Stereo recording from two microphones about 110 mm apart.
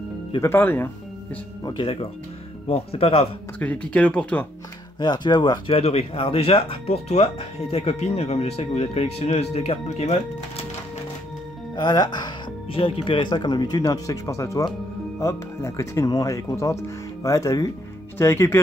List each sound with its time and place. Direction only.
0.4 s speech: 20° left (ahead or behind)
1.6 s speech: 45° left (ahead or behind)
2.7 s speech: 65° left (ahead or behind)
3.5 s speech: 15° left (ahead or behind)
5.0 s speech: 40° left (ahead or behind)
5.7 s speech: 65° left (ahead or behind); by 10.1 s 80° left
11.7 s speech: 40° left (ahead or behind)
12.7 s speech: 55° left (ahead or behind); by 18.6 s 25° left (ahead or behind)